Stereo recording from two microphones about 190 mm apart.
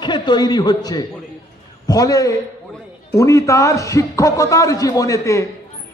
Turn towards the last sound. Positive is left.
turn(degrees=15)  # may be behind; listen again after turning